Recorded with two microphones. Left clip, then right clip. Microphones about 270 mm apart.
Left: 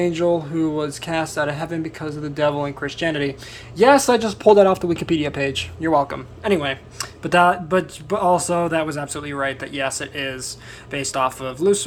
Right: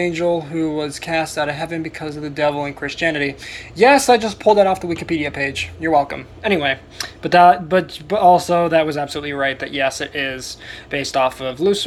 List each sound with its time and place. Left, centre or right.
0.0 s speech: left